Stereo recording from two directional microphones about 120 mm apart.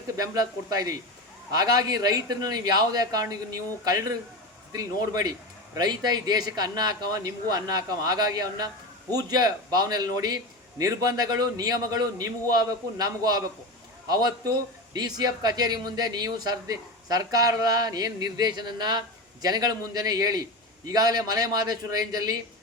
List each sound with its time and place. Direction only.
0.2 s speech: 30° right (ahead or behind)